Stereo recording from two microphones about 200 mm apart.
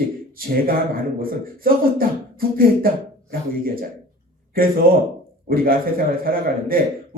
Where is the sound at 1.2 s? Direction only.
45° right (ahead or behind).